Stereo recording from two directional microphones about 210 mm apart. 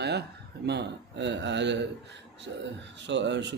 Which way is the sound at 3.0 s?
55° right (ahead or behind).